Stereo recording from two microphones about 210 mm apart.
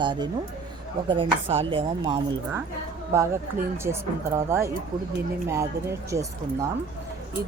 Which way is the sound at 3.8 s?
10° right (ahead or behind).